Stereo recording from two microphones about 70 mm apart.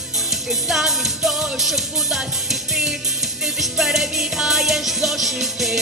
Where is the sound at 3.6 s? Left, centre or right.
Centre.